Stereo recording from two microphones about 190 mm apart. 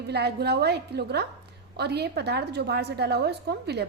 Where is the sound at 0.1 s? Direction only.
60° right (ahead or behind).